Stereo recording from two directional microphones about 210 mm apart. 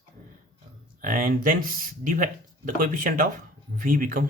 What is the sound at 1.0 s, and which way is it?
Speech, 40° right (ahead or behind).